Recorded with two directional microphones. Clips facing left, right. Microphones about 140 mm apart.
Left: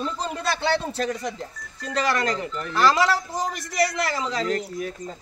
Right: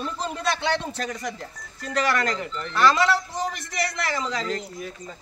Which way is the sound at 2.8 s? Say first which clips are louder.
Even; 40° left (ahead or behind).